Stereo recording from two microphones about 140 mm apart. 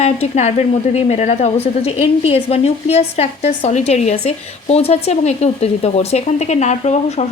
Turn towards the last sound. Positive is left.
turn(degrees=50)  # may be behind; listen again after turning